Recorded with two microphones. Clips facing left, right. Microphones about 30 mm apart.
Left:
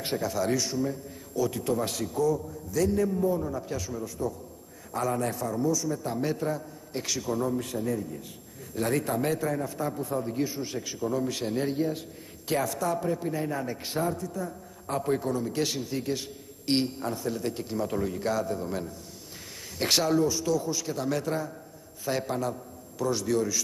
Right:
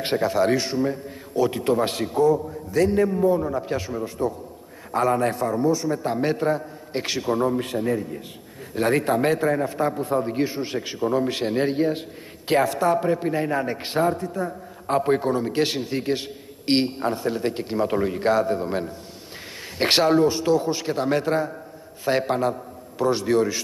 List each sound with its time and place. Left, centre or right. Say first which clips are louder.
0.0 s a man's voice: right 8 dB; right